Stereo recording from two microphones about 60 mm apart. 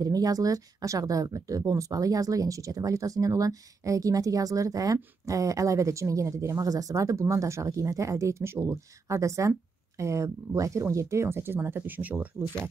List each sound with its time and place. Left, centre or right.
0.0 s speech: right